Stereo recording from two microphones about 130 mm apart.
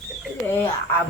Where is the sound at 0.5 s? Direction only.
15° left (ahead or behind).